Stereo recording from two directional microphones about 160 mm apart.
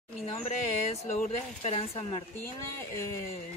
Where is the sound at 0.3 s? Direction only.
40° left (ahead or behind).